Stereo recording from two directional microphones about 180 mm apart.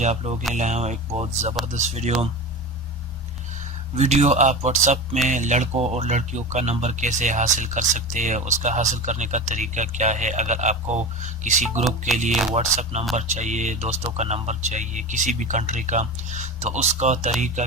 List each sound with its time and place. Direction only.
0.0 s speech: 40° right (ahead or behind)
3.9 s speech: 40° right (ahead or behind)
12.3 s speech: centre (ahead or behind)
12.5 s speech: 40° right (ahead or behind)